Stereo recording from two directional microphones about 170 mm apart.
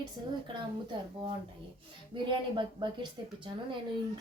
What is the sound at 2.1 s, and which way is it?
Speech, 30° right (ahead or behind).